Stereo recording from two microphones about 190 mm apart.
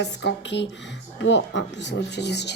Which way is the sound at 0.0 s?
65° left (ahead or behind).